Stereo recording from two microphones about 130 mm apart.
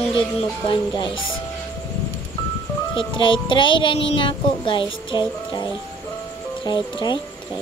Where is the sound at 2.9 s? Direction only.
40° left (ahead or behind).